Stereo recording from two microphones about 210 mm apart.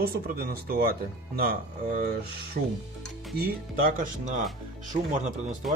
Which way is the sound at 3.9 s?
35° right (ahead or behind).